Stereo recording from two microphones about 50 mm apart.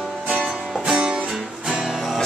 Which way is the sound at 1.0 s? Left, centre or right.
Right.